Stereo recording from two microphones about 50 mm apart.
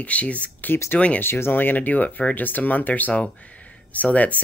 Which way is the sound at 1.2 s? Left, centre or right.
Left.